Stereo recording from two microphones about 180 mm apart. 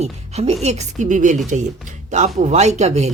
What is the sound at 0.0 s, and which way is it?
Speech, 35° right (ahead or behind).